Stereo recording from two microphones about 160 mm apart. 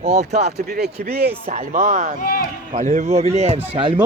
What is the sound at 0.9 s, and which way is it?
Speech, 80° right.